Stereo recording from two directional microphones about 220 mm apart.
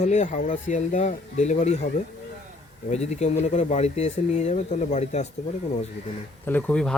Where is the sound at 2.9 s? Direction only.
30° left (ahead or behind).